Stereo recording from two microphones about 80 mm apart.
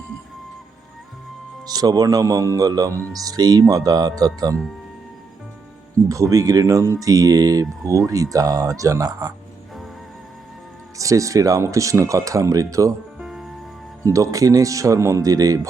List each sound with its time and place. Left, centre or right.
1.6 s speech: right
6.1 s speech: right
10.9 s speech: right
13.1 s music: centre
14.0 s speech: right